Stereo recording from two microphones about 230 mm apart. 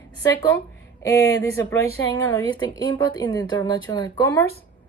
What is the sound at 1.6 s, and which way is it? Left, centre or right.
Speech, centre.